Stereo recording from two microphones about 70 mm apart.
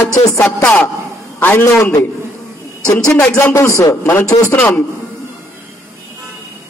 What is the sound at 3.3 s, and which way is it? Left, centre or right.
Speech, left.